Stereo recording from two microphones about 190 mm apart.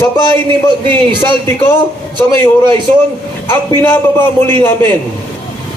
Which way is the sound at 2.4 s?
25° right (ahead or behind).